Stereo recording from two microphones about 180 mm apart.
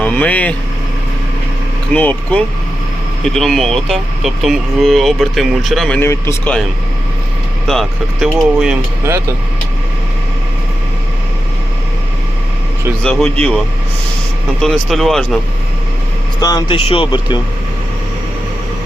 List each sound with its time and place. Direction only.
0.0 s speech: 10° left (ahead or behind)
1.9 s speech: 10° left (ahead or behind)
6.0 s speech: 15° left (ahead or behind)
7.7 s speech: centre (ahead or behind)
13.0 s speech: 5° left (ahead or behind)
14.6 s speech: centre (ahead or behind)
16.4 s speech: 20° left (ahead or behind)